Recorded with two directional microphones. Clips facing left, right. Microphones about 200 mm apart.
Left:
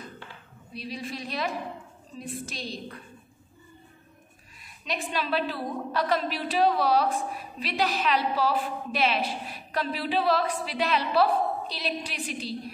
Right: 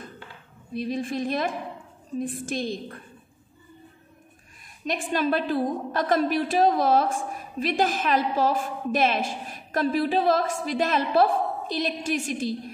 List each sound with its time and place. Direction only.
0.7 s a woman's voice: 50° right (ahead or behind)
4.8 s a woman's voice: 50° right (ahead or behind)